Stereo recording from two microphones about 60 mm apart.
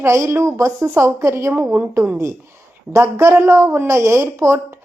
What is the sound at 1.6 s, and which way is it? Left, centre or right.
Speech, right.